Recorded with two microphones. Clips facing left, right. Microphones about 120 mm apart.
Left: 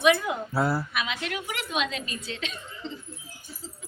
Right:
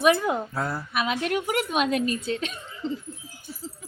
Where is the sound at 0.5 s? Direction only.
5° left (ahead or behind).